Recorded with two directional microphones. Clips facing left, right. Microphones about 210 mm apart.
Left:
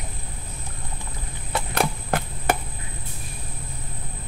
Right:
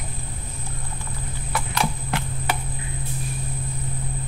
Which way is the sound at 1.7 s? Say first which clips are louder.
Left 3 dB; 50° left (ahead or behind).